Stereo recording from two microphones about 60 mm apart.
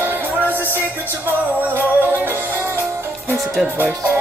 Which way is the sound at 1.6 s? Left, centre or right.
Right.